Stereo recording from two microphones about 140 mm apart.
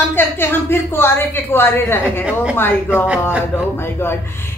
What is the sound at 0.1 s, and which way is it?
A woman's voice, 15° left (ahead or behind).